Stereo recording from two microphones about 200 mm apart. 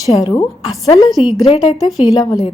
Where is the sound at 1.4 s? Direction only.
30° left (ahead or behind).